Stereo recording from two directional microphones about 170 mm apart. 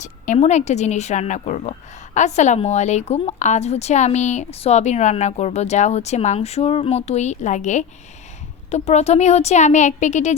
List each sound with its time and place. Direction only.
0.0 s a woman's voice: 45° left (ahead or behind)